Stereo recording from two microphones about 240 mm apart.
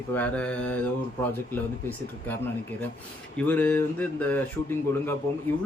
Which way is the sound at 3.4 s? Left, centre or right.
Centre.